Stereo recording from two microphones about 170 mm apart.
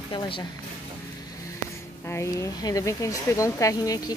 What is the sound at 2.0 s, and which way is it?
Speech, 15° left (ahead or behind).